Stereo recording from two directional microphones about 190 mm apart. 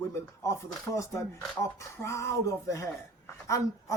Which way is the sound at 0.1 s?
15° left (ahead or behind).